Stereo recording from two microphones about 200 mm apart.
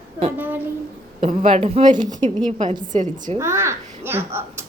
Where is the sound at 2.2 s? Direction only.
25° right (ahead or behind).